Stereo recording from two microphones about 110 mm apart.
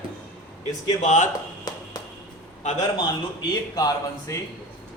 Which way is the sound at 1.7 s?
35° left (ahead or behind).